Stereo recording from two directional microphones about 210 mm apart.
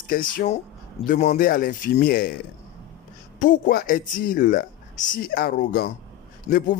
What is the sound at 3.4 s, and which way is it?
Speech, 40° left (ahead or behind).